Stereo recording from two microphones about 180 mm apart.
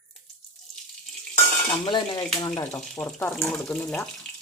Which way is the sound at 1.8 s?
25° left (ahead or behind).